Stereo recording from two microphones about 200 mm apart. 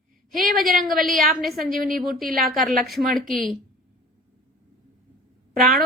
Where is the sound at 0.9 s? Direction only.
Centre (ahead or behind).